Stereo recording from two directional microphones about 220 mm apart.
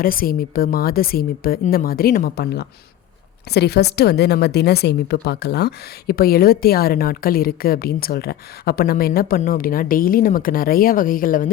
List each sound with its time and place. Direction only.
0.0 s a woman's voice: 40° left (ahead or behind)